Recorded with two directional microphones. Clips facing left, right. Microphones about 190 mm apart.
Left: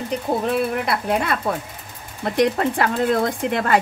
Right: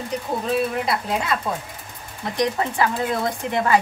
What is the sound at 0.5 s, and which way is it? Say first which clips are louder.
Speech: right 2 dB; 60° left (ahead or behind).